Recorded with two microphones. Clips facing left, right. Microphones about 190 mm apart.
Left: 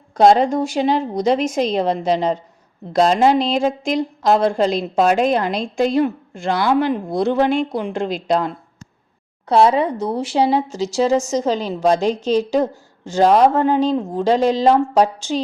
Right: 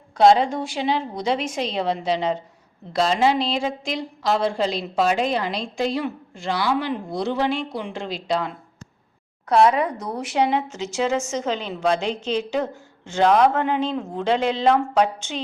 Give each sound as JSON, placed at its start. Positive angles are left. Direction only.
{"t": 0.2, "sound": "a woman's voice", "side_deg": 45}
{"t": 9.5, "sound": "speech", "side_deg": 30}